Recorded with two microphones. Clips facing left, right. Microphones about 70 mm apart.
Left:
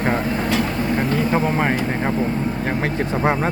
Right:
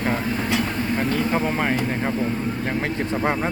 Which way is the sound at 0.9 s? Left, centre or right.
Centre.